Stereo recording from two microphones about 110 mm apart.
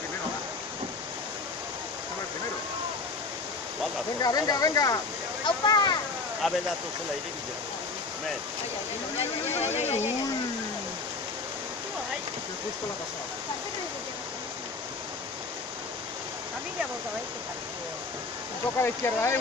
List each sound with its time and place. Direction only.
4.2 s speech: 35° left (ahead or behind)
5.7 s a sound: 35° left (ahead or behind)
6.4 s speech: centre (ahead or behind)
9.2 s speech: 75° left (ahead or behind)
18.8 s speech: 25° left (ahead or behind)